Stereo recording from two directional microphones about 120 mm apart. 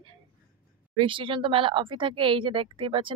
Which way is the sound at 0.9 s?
45° right (ahead or behind).